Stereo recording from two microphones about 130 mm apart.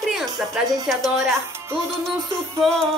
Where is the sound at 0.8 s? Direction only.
Centre (ahead or behind).